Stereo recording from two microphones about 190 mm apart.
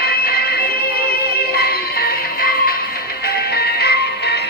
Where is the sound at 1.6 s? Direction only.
55° left (ahead or behind).